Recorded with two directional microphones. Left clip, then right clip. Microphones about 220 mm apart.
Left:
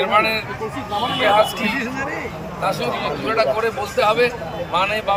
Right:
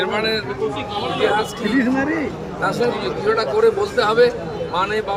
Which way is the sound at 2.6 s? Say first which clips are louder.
Right 2 dB; 10° right (ahead or behind).